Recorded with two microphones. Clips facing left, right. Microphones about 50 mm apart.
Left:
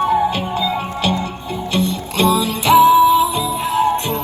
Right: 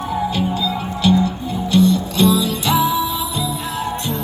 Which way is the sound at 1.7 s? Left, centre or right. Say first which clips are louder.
Right 5 dB; left.